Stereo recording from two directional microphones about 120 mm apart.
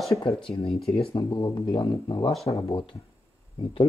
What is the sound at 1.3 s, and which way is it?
Speech, 40° left (ahead or behind).